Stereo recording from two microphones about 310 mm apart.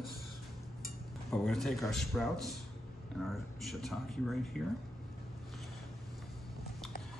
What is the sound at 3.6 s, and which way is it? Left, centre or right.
Speech, centre.